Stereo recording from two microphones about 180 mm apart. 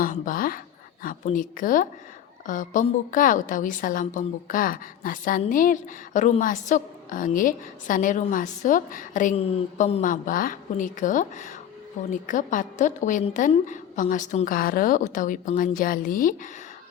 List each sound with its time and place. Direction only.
0.0 s a woman's voice: 50° left (ahead or behind)